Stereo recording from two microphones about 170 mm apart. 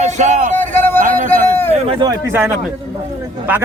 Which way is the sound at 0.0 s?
45° right (ahead or behind).